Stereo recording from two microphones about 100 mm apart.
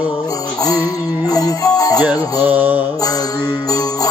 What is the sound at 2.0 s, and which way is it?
Mantra, 15° right (ahead or behind).